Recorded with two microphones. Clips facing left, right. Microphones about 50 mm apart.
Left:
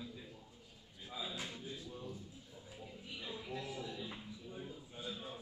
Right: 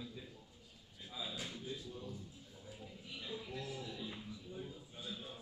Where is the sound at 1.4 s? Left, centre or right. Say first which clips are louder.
Right 1 dB; left.